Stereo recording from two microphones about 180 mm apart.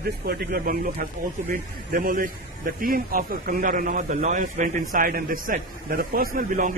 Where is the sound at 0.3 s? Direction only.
60° right (ahead or behind).